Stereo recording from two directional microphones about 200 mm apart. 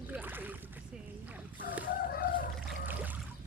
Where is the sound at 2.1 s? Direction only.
45° left (ahead or behind).